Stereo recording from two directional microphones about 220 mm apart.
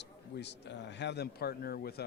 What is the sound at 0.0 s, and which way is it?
Speech, 50° left (ahead or behind).